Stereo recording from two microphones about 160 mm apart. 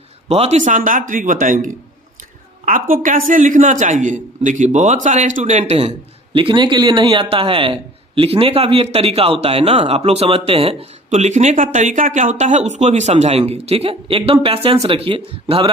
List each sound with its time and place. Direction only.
0.3 s a man's voice: 40° right (ahead or behind)
2.9 s a man's voice: 55° right (ahead or behind)
6.3 s a man's voice: 30° right (ahead or behind)